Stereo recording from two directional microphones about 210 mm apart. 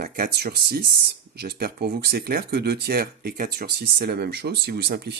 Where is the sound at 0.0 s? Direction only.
45° right (ahead or behind).